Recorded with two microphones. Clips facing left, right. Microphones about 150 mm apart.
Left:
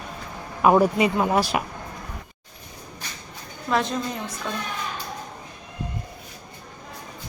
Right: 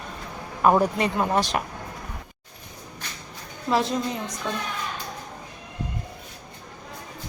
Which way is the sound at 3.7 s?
25° right (ahead or behind).